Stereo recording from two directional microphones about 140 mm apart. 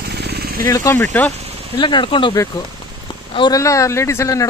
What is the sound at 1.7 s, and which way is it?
Speech, 35° left (ahead or behind).